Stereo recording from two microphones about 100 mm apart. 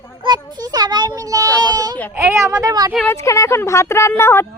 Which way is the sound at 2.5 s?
40° right (ahead or behind).